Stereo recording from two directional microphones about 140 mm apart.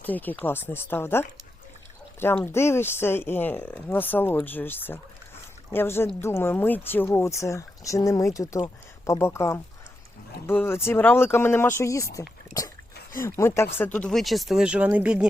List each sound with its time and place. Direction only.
0.0 s speech: 10° left (ahead or behind)
2.2 s speech: 15° left (ahead or behind)
13.2 s speech: 20° left (ahead or behind); by 15.3 s 10° right (ahead or behind)